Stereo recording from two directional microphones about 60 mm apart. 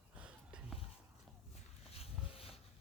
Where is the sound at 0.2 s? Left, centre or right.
Right.